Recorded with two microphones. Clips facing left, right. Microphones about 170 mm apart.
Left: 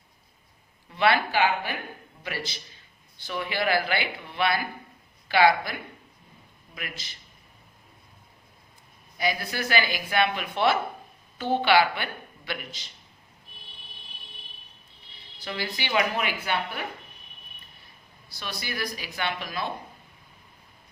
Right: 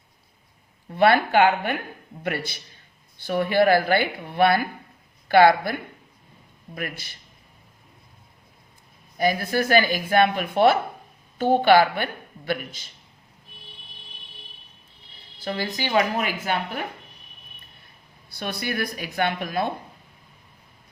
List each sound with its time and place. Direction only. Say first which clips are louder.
0.9 s speech: right 5 dB; 50° right (ahead or behind)
9.1 s speech: right 7 dB; 50° right (ahead or behind)
15.4 s speech: right 5 dB; 45° right (ahead or behind)
18.3 s speech: right 7 dB; 55° right (ahead or behind)